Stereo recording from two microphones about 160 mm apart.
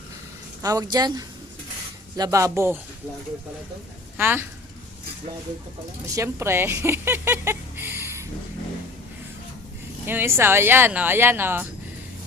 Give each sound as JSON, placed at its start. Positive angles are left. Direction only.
{"t": 0.6, "sound": "speech", "side_deg": -25}
{"t": 4.2, "sound": "speech", "side_deg": -15}
{"t": 6.1, "sound": "speech", "side_deg": -15}
{"t": 10.1, "sound": "speech", "side_deg": -15}